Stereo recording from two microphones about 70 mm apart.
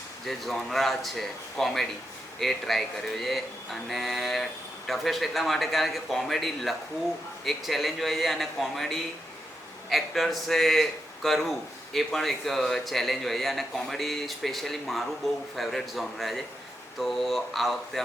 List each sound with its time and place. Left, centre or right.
0.3 s a man's voice: centre